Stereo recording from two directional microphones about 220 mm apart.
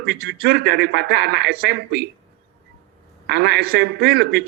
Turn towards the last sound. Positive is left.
turn(degrees=-50)  # may be behind; listen again after turning